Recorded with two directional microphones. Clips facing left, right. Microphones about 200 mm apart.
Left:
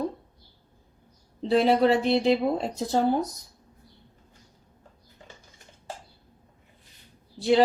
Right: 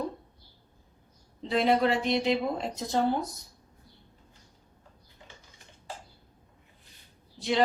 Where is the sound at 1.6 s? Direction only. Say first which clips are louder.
Left 2 dB; 35° left (ahead or behind).